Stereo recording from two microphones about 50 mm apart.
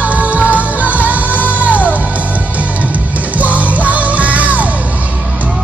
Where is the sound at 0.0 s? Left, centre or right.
Right.